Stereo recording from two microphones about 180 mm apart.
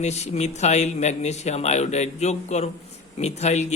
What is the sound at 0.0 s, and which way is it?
A man's voice, 40° left (ahead or behind).